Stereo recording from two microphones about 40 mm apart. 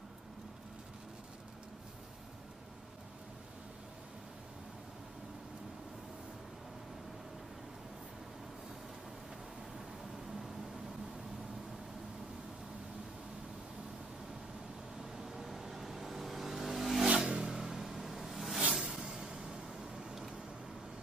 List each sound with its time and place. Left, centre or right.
15.1 s vehicle: centre
17.2 s vehicle: centre
17.9 s a sound: centre